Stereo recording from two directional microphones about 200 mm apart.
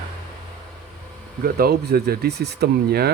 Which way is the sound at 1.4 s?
50° right (ahead or behind).